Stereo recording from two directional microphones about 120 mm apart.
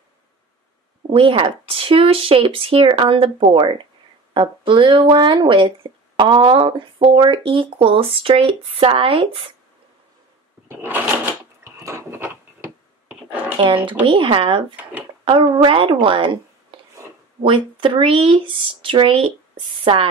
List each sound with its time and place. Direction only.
1.1 s speech: 50° right (ahead or behind)
10.7 s a sound: 15° right (ahead or behind)
13.6 s speech: 50° right (ahead or behind)
17.4 s speech: 50° right (ahead or behind)